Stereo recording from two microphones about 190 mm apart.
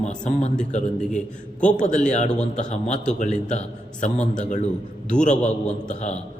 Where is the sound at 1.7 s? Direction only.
40° left (ahead or behind).